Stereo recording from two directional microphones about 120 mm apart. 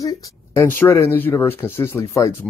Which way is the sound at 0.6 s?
20° left (ahead or behind).